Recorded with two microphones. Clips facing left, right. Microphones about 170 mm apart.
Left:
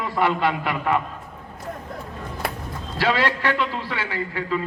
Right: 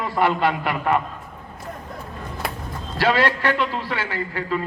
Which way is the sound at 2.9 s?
45° right (ahead or behind).